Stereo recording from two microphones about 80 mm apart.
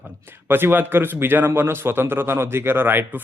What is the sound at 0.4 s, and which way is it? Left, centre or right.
A man's voice, right.